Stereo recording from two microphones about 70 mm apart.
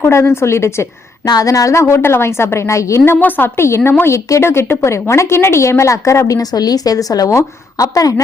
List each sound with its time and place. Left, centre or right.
0.0 s a woman's voice: left
1.2 s a woman's voice: left
3.0 s a woman's voice: left
7.3 s a woman's voice: left